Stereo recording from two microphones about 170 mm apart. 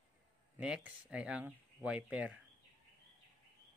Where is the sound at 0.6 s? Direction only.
5° right (ahead or behind).